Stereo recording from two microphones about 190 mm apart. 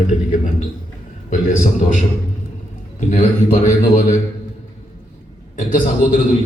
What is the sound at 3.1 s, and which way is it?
A man's voice, 45° left (ahead or behind).